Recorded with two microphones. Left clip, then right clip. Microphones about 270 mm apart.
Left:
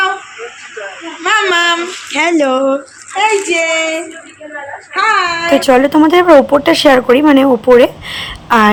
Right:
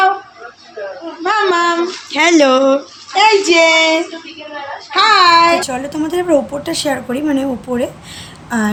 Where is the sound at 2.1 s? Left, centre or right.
Centre.